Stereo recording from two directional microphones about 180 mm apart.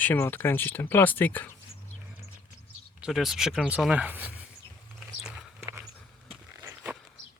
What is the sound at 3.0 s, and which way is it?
Speech, centre (ahead or behind).